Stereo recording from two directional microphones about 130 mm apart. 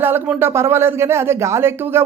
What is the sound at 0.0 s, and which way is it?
A man's voice, 15° right (ahead or behind).